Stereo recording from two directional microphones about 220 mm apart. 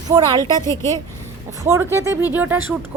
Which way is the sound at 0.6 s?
10° left (ahead or behind).